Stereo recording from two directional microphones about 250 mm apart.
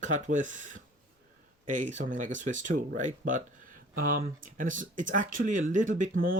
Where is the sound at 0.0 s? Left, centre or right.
Right.